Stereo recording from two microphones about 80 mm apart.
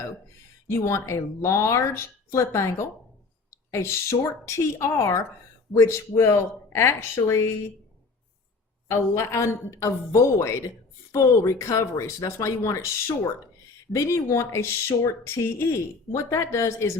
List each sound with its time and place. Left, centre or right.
0.7 s speech: left
8.9 s speech: left